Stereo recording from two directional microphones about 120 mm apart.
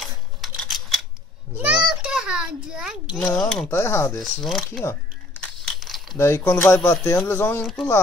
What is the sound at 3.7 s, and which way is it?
Speech, 20° left (ahead or behind).